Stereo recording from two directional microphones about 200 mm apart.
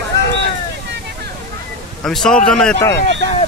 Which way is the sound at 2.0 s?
Centre (ahead or behind).